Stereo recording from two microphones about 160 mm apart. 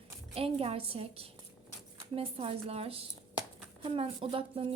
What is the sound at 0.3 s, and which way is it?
A woman's voice, 40° right (ahead or behind).